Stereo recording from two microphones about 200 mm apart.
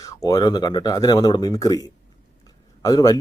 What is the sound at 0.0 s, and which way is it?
Speech, 20° left (ahead or behind).